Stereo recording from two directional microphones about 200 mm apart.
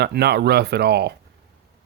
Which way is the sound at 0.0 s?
55° right (ahead or behind).